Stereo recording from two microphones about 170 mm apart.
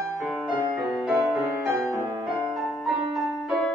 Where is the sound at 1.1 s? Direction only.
5° right (ahead or behind).